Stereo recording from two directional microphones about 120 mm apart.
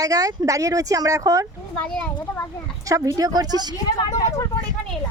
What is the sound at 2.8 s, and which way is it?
Speech, 30° right (ahead or behind).